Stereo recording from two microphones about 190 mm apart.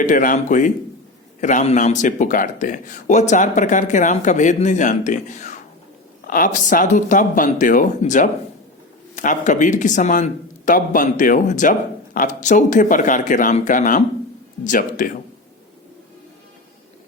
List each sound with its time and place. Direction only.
0.0 s a man's voice: 45° left (ahead or behind)